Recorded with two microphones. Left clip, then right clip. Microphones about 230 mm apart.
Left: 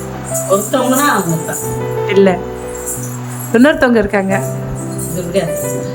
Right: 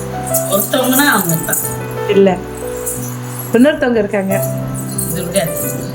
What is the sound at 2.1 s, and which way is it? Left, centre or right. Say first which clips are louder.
Speech: even; centre.